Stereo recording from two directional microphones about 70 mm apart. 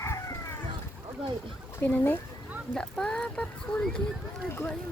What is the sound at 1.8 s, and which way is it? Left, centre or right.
Speech, left.